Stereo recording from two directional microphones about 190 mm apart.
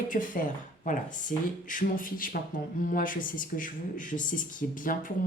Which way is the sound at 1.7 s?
45° left (ahead or behind).